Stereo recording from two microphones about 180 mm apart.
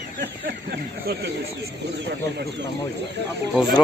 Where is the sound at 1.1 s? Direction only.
60° right (ahead or behind).